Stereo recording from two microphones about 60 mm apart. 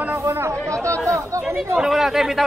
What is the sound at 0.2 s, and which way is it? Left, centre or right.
Speech, right.